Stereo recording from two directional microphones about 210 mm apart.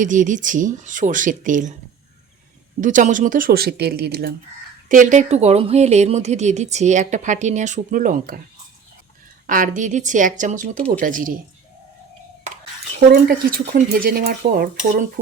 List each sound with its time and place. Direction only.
0.0 s speech: 40° right (ahead or behind)
2.8 s speech: 35° right (ahead or behind)
4.9 s speech: 35° right (ahead or behind)
9.5 s speech: 40° right (ahead or behind)
13.7 s speech: 40° right (ahead or behind)